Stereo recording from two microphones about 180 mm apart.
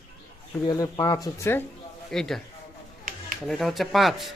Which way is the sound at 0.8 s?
20° left (ahead or behind).